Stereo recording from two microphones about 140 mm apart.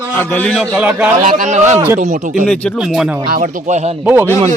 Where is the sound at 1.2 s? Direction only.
65° right (ahead or behind).